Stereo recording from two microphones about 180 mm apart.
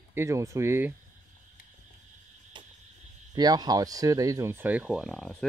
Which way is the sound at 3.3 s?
20° right (ahead or behind).